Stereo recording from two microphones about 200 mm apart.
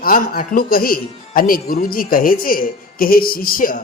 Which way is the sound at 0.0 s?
45° left (ahead or behind).